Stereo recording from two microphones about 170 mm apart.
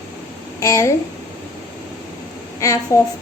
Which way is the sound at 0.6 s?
20° left (ahead or behind).